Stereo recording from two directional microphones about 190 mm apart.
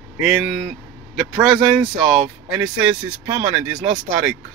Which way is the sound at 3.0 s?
25° right (ahead or behind).